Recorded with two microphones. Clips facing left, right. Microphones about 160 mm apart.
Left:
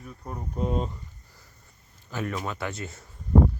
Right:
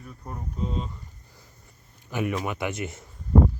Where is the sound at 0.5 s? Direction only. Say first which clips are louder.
Left 4 dB; 55° left (ahead or behind).